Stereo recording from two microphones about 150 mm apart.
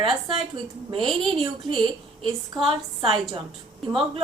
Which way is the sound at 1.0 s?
Centre (ahead or behind).